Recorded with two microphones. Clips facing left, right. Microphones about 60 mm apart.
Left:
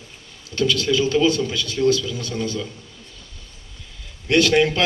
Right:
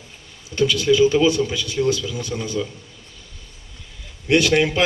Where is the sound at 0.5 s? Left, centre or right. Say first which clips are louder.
Right 3 dB; centre.